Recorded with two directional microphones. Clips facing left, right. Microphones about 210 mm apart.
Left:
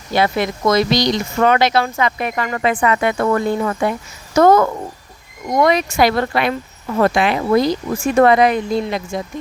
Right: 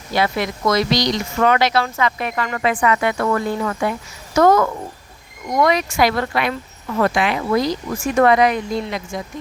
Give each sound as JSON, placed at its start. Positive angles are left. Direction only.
{"t": 0.1, "sound": "speech", "side_deg": 25}
{"t": 2.5, "sound": "speech", "side_deg": 30}